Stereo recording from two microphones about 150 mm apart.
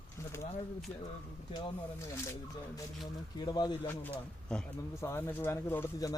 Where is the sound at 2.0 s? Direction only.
20° left (ahead or behind).